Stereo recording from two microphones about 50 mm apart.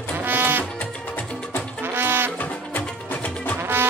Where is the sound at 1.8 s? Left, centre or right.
Right.